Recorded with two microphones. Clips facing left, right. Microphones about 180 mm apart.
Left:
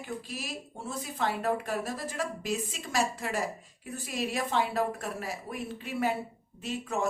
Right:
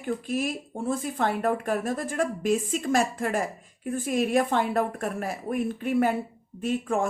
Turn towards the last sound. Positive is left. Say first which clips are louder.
# right 6 dB
turn(degrees=-50)  # may be behind; listen again after turning